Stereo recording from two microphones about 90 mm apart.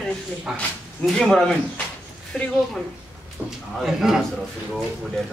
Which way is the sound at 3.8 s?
5° right (ahead or behind).